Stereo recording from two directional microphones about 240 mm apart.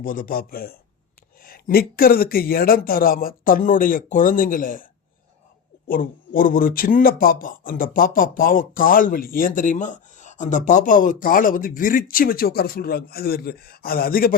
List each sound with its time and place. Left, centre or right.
0.0 s speech: left
5.9 s speech: left